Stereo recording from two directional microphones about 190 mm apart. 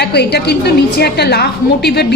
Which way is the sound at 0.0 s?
60° left (ahead or behind).